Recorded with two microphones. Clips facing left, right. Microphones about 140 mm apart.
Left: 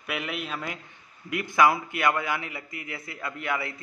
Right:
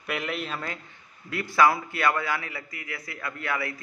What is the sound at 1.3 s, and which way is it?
A man's voice, 20° left (ahead or behind).